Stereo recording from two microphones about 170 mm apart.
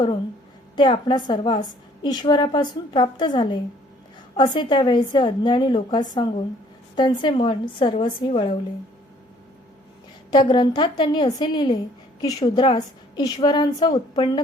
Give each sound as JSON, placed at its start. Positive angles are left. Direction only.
{"t": 0.8, "sound": "a woman's voice", "side_deg": 30}
{"t": 10.3, "sound": "a woman's voice", "side_deg": 25}